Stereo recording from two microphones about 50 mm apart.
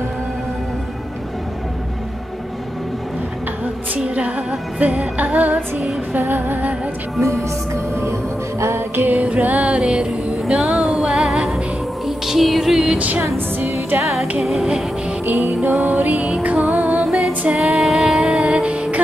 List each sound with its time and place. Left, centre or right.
4.0 s music: right
6.1 s music: right
7.2 s speech: right
8.9 s music: right; by 12.9 s centre
12.9 s music: right
14.4 s music: centre
15.2 s music: right
17.6 s music: centre
18.5 s music: right